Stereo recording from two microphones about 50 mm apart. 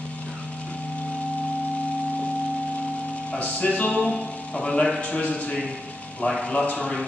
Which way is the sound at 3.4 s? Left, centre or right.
Left.